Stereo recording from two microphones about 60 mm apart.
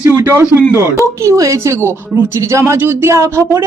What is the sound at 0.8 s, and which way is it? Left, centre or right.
Speech, right.